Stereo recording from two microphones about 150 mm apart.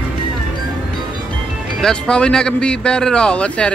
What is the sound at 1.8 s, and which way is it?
Speech, 5° left (ahead or behind).